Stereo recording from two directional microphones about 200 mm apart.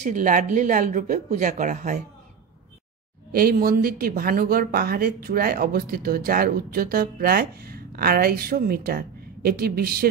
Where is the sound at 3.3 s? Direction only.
50° right (ahead or behind).